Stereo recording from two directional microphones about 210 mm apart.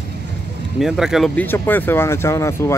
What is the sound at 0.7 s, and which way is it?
Speech, centre (ahead or behind).